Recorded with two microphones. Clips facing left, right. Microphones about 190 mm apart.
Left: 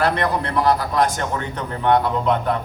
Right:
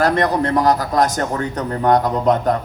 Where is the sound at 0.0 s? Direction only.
40° right (ahead or behind).